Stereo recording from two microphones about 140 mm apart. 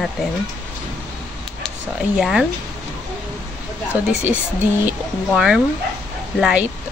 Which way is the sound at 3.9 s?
10° right (ahead or behind).